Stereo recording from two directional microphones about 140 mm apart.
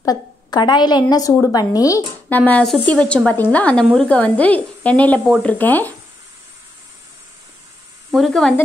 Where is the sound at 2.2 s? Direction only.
10° left (ahead or behind).